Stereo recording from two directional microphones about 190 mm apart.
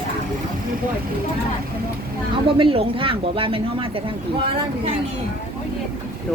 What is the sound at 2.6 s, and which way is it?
Speech, 30° right (ahead or behind).